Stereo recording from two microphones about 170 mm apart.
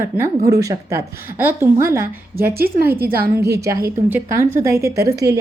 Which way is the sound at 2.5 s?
65° right (ahead or behind).